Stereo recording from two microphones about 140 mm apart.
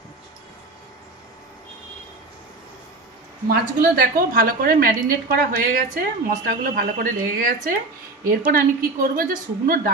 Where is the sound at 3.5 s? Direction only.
90° right.